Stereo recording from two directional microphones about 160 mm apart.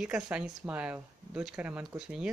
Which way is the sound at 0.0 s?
5° right (ahead or behind).